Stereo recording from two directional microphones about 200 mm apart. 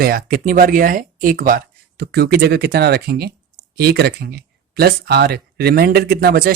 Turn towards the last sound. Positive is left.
turn(degrees=-50)  # may be behind; listen again after turning